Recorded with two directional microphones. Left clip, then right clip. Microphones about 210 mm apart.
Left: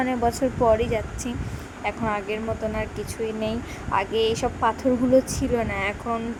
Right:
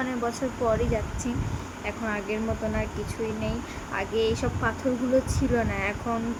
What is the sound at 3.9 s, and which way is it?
Speech, 15° left (ahead or behind).